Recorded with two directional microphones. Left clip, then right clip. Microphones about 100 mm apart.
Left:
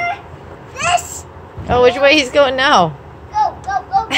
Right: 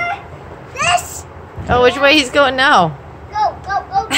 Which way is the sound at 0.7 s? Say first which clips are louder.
Right 1 dB; 40° right (ahead or behind).